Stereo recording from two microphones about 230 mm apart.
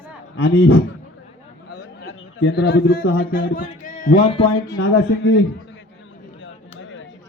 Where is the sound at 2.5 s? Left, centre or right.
Left; by 4.7 s centre.